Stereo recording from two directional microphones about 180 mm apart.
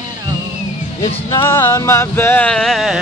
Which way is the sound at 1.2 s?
15° left (ahead or behind).